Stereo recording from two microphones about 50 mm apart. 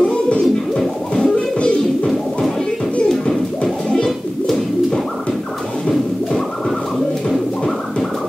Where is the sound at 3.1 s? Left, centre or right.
Centre.